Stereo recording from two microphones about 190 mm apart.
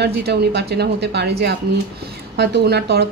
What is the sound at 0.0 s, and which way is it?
A woman's voice, 60° right (ahead or behind).